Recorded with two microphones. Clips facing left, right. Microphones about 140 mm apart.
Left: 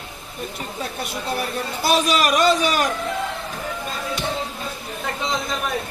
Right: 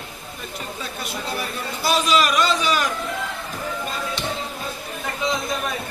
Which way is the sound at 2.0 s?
50° left (ahead or behind).